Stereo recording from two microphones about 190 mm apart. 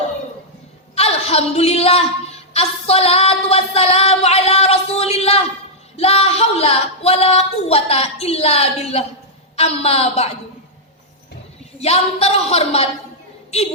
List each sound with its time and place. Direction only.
0.9 s a woman's voice: 35° left (ahead or behind)
2.5 s a sound: 35° left (ahead or behind)
6.0 s a woman's voice: 35° left (ahead or behind)
11.8 s a woman's voice: 35° left (ahead or behind)